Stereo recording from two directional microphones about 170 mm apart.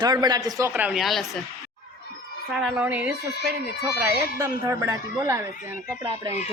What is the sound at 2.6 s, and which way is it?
A woman's voice, 5° right (ahead or behind).